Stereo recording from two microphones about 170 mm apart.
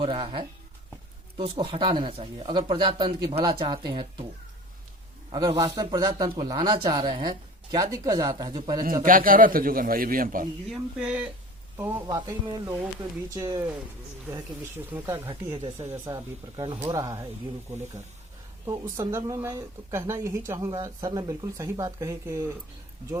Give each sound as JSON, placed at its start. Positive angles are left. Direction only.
{"t": 0.0, "sound": "speech", "side_deg": -35}
{"t": 5.3, "sound": "a woman's voice", "side_deg": -25}
{"t": 9.0, "sound": "a man's voice", "side_deg": -55}
{"t": 10.7, "sound": "a woman's voice", "side_deg": -5}
{"t": 14.9, "sound": "a woman's voice", "side_deg": -15}
{"t": 18.6, "sound": "a woman's voice", "side_deg": -20}